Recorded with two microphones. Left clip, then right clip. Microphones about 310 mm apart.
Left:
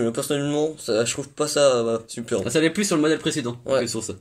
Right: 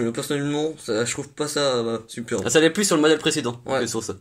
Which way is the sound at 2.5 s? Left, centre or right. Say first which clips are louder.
Right 4 dB; right.